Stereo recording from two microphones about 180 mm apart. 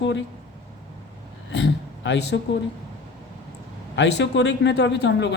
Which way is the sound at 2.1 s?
80° left.